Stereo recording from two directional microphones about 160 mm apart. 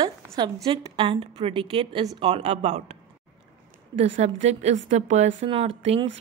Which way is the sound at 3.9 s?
45° right (ahead or behind).